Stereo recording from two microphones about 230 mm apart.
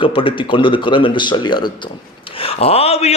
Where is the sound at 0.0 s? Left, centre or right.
Left.